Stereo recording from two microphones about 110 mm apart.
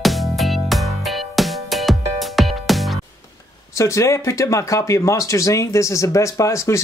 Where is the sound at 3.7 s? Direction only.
25° left (ahead or behind).